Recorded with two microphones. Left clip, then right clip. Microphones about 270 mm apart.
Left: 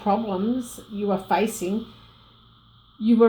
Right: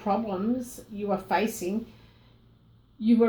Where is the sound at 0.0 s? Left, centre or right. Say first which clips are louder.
Left 4 dB; left.